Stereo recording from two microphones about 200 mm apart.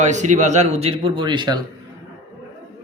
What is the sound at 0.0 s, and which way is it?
Speech, 35° right (ahead or behind).